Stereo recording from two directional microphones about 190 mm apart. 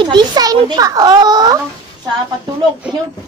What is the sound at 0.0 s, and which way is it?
A child's voice, 25° right (ahead or behind).